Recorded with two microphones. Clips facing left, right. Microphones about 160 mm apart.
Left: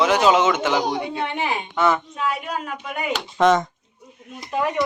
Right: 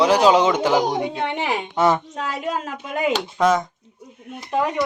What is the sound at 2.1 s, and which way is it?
Speech, 90° right.